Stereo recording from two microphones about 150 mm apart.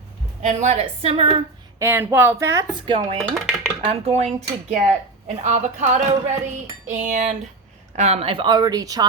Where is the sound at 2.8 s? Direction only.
35° right (ahead or behind).